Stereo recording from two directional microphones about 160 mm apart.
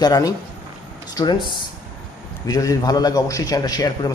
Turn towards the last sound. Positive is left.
turn(degrees=25)  # may be behind; listen again after turning